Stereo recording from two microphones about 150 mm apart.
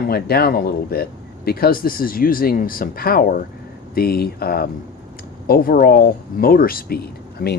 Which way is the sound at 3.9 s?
90° left.